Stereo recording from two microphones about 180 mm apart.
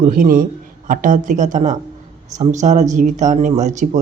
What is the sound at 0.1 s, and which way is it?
Speech, 50° right (ahead or behind).